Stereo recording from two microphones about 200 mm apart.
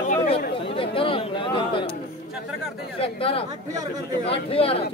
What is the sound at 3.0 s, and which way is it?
Speech, 30° left (ahead or behind).